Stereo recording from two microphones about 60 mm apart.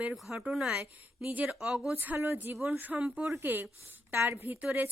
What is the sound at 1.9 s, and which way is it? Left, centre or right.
Speech, right.